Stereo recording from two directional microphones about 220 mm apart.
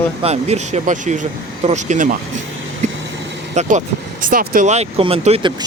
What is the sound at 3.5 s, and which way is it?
Speech, 30° right (ahead or behind).